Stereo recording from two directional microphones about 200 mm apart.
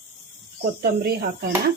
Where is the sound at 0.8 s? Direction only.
50° right (ahead or behind).